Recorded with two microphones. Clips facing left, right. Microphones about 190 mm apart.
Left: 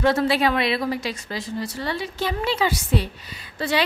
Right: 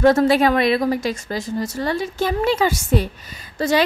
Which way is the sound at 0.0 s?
45° right (ahead or behind).